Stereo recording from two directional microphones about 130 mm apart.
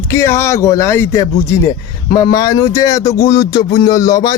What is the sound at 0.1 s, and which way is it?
A man's voice, 20° left (ahead or behind).